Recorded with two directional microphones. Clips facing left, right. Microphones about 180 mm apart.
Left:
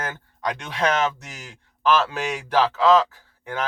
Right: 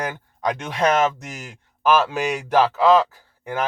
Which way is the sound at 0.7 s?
45° right (ahead or behind).